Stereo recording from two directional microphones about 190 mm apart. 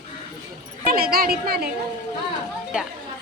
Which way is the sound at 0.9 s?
50° right (ahead or behind).